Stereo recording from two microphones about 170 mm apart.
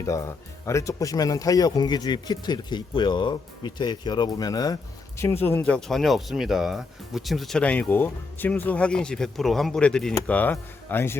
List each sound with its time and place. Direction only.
0.0 s speech: 20° left (ahead or behind)